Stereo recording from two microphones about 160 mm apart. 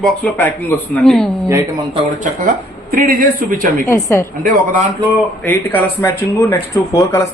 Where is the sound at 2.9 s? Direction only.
65° right (ahead or behind).